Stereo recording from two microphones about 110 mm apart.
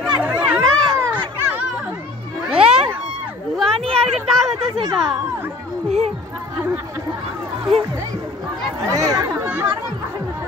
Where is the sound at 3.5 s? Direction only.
5° left (ahead or behind).